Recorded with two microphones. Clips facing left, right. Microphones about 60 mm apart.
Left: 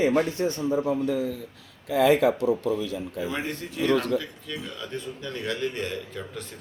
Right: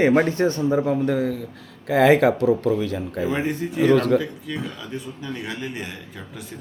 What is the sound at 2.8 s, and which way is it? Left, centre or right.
Speech, right.